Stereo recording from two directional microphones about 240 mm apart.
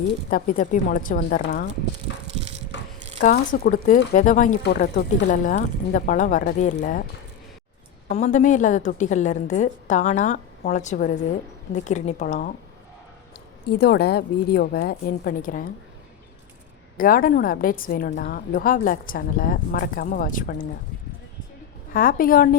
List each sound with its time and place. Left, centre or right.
0.3 s a woman's voice: left
2.1 s bicycle: left
2.7 s a sound: left
3.2 s a woman's voice: left
8.0 s a woman's voice: left
13.7 s a woman's voice: left
17.0 s a woman's voice: left
21.9 s a woman's voice: left